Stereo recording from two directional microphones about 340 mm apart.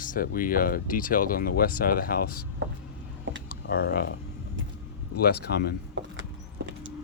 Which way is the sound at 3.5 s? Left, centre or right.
Left.